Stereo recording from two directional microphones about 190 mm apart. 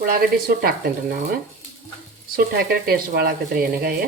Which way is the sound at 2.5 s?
55° right (ahead or behind).